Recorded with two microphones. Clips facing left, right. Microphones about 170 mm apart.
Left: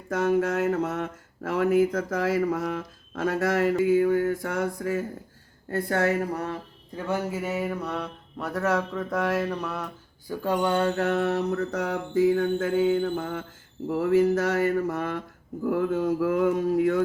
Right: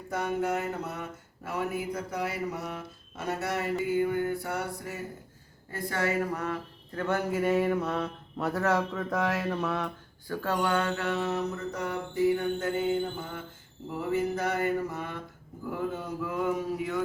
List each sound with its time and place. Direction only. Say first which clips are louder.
0.1 s speech: left 6 dB; 90° left
4.1 s a woman's voice: left 6 dB; 45° left (ahead or behind)
4.4 s speech: left 7 dB; 90° left
5.7 s a woman's voice: left 6 dB; 50° left (ahead or behind)
6.3 s a sound: left 2 dB; 35° left (ahead or behind)
6.9 s mantra: even; 5° left (ahead or behind)
10.2 s speech: left 4 dB; 15° left (ahead or behind)
10.8 s mantra: left 5 dB; 40° left (ahead or behind); by 12.9 s 90° left
14.0 s speech: left 7 dB; 90° left
14.9 s a sound: left 7 dB; 80° left
15.6 s mantra: left 8 dB; 70° left (ahead or behind)
16.0 s mantra: left 9 dB; 80° left; by 17.0 s 60° left (ahead or behind)